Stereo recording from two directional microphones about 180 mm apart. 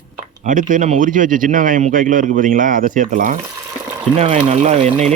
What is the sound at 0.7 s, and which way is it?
Speech, 45° right (ahead or behind).